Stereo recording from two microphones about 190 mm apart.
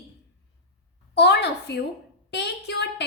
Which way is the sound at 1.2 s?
65° left (ahead or behind).